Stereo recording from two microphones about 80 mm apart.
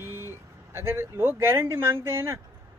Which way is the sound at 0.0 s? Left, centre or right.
Right.